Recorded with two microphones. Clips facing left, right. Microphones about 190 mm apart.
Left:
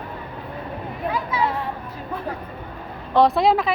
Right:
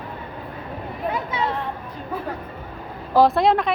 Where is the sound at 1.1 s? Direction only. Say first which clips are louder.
Left 3 dB; 25° right (ahead or behind).